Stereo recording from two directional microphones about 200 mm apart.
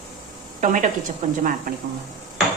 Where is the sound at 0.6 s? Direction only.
40° right (ahead or behind).